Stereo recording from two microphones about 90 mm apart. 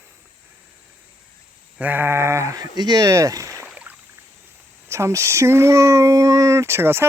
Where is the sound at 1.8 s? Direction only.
20° right (ahead or behind).